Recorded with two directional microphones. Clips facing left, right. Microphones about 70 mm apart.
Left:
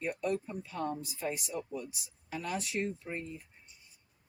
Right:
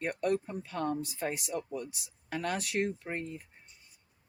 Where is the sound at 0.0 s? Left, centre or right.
Right.